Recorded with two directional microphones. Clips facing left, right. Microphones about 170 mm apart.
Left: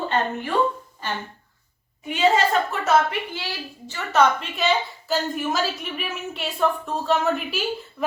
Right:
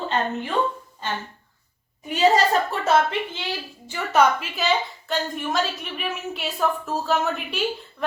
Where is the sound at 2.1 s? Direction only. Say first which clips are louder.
Right 1 dB; 40° right (ahead or behind).